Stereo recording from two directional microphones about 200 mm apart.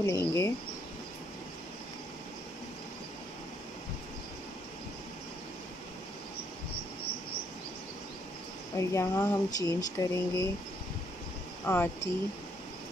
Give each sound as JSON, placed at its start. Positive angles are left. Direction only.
{"t": 0.0, "sound": "speech", "side_deg": 15}
{"t": 8.7, "sound": "speech", "side_deg": 15}
{"t": 11.6, "sound": "speech", "side_deg": 10}